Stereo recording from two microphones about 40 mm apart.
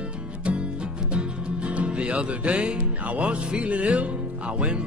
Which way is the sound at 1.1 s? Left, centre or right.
Right.